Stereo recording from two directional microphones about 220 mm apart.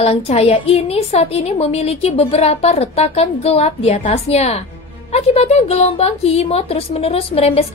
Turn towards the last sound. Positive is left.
turn(degrees=25)  # may be behind; listen again after turning